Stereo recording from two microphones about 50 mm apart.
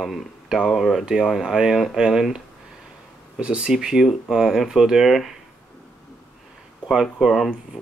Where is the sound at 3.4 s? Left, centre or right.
Right.